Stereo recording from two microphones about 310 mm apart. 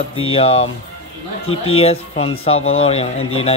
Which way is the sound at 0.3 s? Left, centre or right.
Centre.